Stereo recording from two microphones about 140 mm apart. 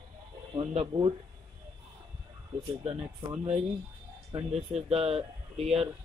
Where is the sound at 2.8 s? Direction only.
50° right (ahead or behind).